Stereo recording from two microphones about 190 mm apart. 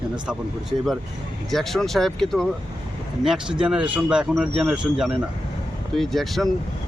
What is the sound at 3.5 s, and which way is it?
Speech, 5° right (ahead or behind).